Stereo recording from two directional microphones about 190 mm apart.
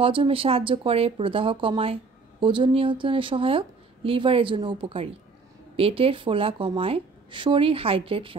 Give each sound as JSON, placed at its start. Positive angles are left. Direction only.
{"t": 0.0, "sound": "a woman's voice", "side_deg": -30}